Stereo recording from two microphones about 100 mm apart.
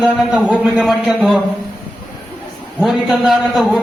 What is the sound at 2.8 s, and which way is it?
Speech, 5° right (ahead or behind).